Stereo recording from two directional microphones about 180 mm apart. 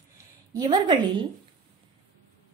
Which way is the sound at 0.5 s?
25° right (ahead or behind).